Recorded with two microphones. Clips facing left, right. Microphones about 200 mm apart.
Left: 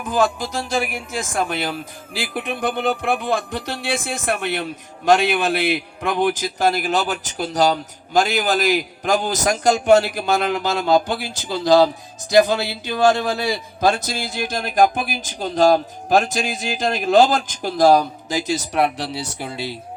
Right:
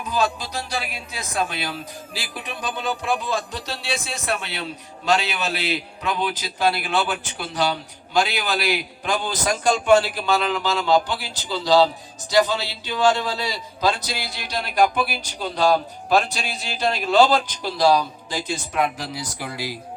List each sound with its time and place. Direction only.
0.0 s speech: 50° left (ahead or behind)
18.6 s speech: 35° left (ahead or behind)